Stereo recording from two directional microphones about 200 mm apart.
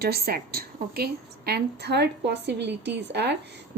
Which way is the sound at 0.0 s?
50° right (ahead or behind).